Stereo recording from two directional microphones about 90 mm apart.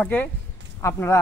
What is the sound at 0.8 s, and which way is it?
Speech, 30° left (ahead or behind).